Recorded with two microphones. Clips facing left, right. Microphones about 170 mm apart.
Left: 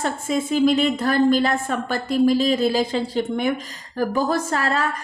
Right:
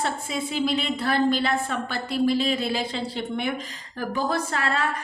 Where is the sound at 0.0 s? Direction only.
45° left (ahead or behind).